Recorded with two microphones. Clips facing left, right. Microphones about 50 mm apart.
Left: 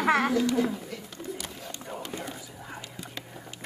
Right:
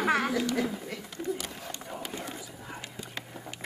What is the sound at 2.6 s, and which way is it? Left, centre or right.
Whispering, centre.